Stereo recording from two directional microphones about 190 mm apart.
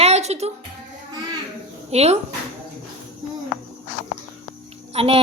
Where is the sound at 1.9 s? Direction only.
35° right (ahead or behind).